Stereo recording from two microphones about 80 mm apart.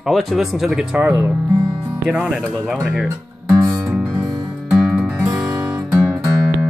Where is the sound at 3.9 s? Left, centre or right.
Centre.